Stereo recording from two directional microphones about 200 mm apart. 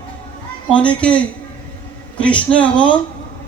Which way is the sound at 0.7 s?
25° left (ahead or behind).